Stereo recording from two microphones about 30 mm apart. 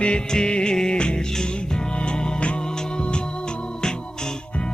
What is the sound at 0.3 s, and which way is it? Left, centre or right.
Music, left.